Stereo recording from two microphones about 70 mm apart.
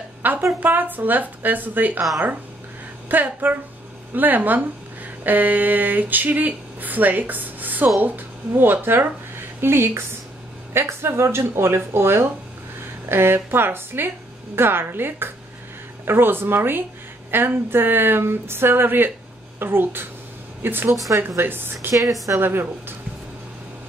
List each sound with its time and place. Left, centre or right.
0.2 s a woman's voice: right
3.1 s a woman's voice: right